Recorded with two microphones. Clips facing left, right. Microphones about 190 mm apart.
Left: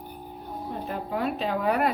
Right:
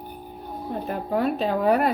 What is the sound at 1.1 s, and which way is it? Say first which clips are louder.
Speech: right 5 dB; 40° right (ahead or behind).